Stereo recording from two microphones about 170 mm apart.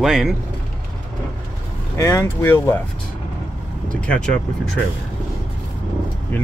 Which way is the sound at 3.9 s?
5° left (ahead or behind).